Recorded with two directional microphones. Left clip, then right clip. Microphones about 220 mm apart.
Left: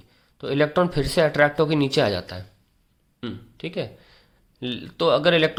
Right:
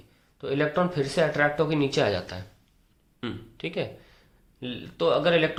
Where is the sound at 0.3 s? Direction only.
35° left (ahead or behind).